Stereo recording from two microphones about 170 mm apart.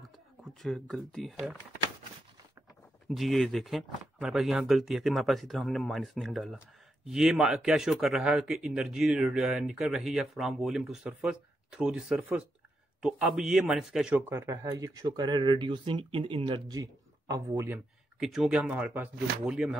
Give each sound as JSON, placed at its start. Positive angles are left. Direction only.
{"t": 0.4, "sound": "speech", "side_deg": 0}
{"t": 3.1, "sound": "a man's voice", "side_deg": 0}
{"t": 18.2, "sound": "speech", "side_deg": 0}